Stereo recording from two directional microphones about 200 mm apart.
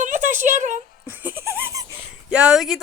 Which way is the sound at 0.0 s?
40° right (ahead or behind).